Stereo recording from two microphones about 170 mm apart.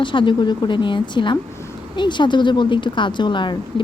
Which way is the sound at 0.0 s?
30° left (ahead or behind).